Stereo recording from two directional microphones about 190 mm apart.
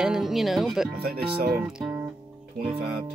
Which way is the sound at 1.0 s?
55° right (ahead or behind).